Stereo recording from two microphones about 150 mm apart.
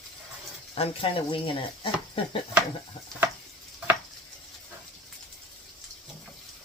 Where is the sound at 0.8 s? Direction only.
40° left (ahead or behind).